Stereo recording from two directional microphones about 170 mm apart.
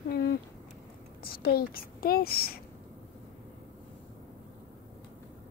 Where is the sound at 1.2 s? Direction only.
60° left (ahead or behind).